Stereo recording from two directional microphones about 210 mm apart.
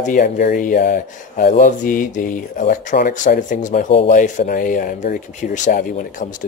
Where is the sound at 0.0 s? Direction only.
40° left (ahead or behind).